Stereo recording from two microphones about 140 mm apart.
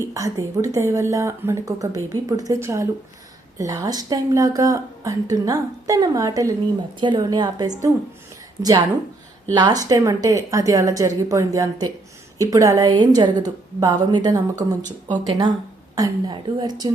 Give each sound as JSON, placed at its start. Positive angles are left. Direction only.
{"t": 0.0, "sound": "speech", "side_deg": -20}